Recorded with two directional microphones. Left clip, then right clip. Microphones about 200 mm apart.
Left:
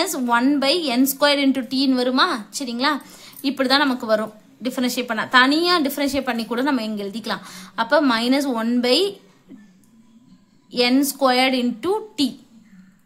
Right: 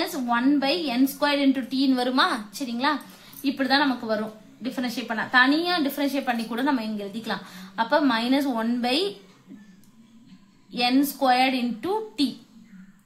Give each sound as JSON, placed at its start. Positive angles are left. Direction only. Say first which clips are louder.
{"t": 0.0, "sound": "a woman's voice", "louder": "left 5 dB", "side_deg": 35}
{"t": 10.7, "sound": "a woman's voice", "louder": "left 4 dB", "side_deg": 35}